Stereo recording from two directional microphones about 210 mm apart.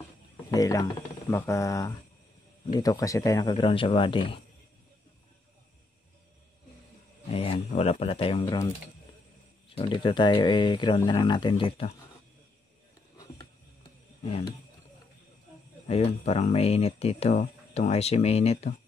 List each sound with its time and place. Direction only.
0.5 s speech: 15° left (ahead or behind)
7.2 s speech: 25° left (ahead or behind)
9.8 s speech: 25° left (ahead or behind)
15.9 s speech: 30° left (ahead or behind)